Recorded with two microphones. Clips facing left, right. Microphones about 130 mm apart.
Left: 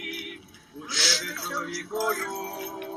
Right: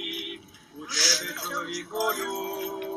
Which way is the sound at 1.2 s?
15° right (ahead or behind).